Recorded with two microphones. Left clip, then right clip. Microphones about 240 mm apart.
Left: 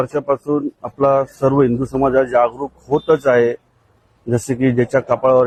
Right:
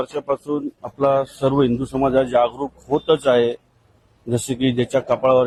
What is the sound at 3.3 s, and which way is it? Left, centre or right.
A man's voice, right.